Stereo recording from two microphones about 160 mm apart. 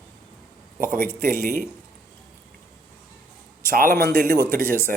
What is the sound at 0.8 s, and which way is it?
Speech, 60° right (ahead or behind).